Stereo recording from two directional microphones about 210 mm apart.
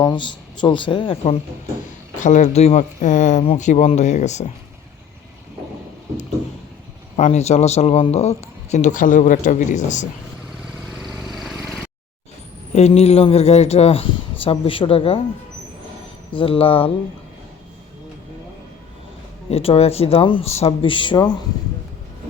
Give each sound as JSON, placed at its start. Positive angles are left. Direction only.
{"t": 0.0, "sound": "a man's voice", "side_deg": 20}
{"t": 7.2, "sound": "a man's voice", "side_deg": 30}
{"t": 11.0, "sound": "vehicle", "side_deg": 0}
{"t": 12.7, "sound": "speech", "side_deg": 30}
{"t": 16.3, "sound": "speech", "side_deg": 25}
{"t": 19.5, "sound": "speech", "side_deg": 30}